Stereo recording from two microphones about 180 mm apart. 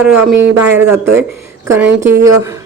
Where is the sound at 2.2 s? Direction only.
20° right (ahead or behind).